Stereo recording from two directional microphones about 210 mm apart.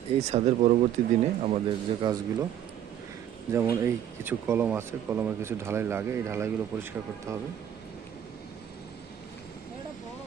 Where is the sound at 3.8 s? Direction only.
10° right (ahead or behind).